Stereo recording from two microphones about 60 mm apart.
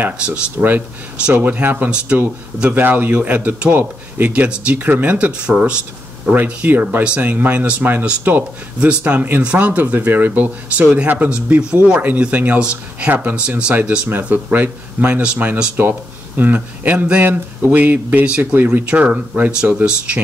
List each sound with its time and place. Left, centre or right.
0.2 s speech: right
2.1 s speech: right
2.7 s speech: right